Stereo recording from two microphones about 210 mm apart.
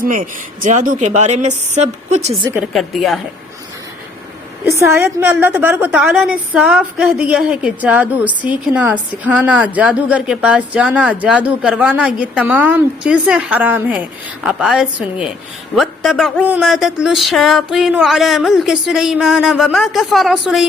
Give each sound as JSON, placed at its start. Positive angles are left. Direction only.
{"t": 0.0, "sound": "a woman's voice", "side_deg": -40}
{"t": 2.5, "sound": "speech", "side_deg": -5}
{"t": 4.7, "sound": "a woman's voice", "side_deg": -15}